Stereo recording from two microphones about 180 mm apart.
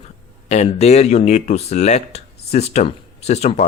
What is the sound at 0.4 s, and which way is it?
Speech, 35° left (ahead or behind).